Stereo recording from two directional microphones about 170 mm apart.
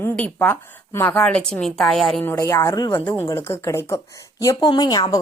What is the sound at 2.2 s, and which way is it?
Speech, 15° left (ahead or behind).